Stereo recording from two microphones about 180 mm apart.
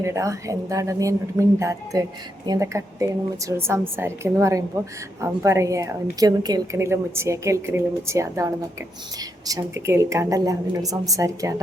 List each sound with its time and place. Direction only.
0.0 s a woman's voice: 15° right (ahead or behind)